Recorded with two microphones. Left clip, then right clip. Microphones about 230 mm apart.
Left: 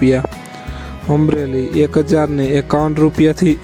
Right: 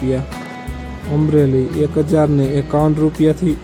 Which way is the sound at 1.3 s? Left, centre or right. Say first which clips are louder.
Right 1 dB; left.